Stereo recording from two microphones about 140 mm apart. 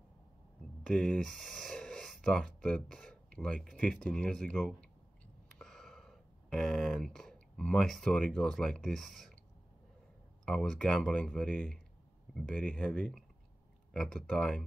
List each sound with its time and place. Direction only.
0.8 s speech: 5° left (ahead or behind)
10.4 s speech: 5° left (ahead or behind)